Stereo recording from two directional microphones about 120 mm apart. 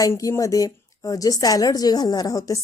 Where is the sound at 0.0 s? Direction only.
30° left (ahead or behind).